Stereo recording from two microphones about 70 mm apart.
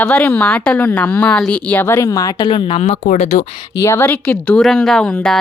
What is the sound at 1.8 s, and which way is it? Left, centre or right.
Speech, left.